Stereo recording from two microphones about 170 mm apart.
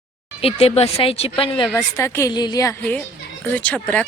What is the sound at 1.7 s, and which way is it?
A woman's voice, 15° left (ahead or behind).